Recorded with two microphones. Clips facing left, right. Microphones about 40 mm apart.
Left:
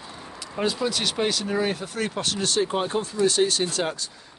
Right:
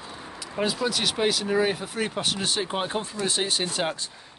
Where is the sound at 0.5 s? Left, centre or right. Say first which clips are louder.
Left 1 dB; centre.